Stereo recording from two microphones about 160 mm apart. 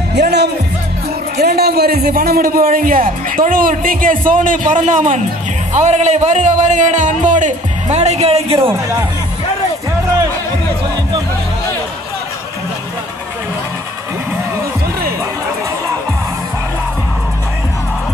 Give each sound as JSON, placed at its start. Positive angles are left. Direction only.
{"t": 0.1, "sound": "music", "side_deg": -90}
{"t": 1.4, "sound": "a man's voice", "side_deg": -80}
{"t": 8.6, "sound": "speech", "side_deg": -20}